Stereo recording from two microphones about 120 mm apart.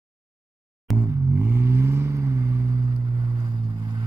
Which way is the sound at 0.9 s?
25° right (ahead or behind).